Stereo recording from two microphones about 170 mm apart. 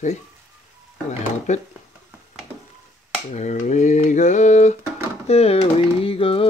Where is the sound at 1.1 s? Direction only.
45° left (ahead or behind).